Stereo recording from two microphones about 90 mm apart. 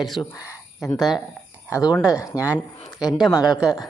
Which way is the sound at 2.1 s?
40° left (ahead or behind).